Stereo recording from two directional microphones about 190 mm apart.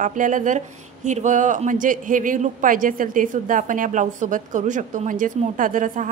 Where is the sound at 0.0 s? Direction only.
45° right (ahead or behind).